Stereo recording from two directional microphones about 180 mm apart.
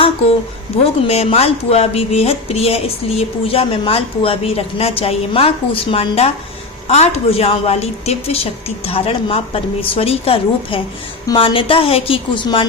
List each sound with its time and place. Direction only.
1.0 s a woman's voice: 35° left (ahead or behind)